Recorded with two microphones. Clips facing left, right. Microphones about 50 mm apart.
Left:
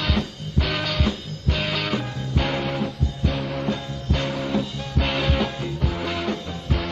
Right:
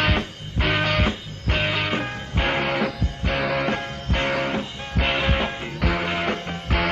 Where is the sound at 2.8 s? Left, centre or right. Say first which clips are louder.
Right 1 dB; right.